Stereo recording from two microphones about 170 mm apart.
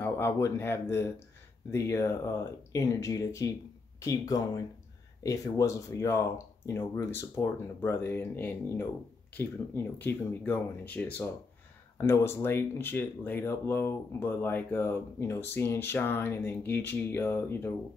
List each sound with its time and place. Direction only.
0.0 s speech: 15° left (ahead or behind)